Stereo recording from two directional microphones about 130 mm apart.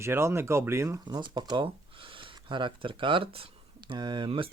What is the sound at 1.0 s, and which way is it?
Speech, 35° right (ahead or behind).